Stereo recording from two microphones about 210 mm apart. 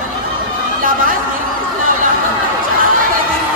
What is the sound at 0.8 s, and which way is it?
Chatter, 40° right (ahead or behind).